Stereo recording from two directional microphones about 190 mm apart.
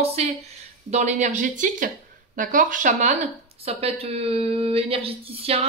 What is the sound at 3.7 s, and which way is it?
A woman's voice, 30° right (ahead or behind).